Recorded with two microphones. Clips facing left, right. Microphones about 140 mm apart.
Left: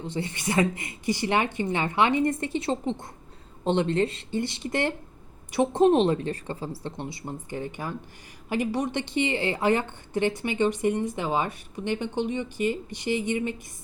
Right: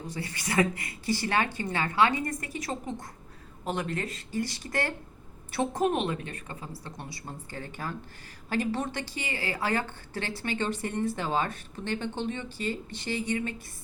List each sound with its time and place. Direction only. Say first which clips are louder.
0.0 s a woman's voice: left 6 dB; 25° left (ahead or behind)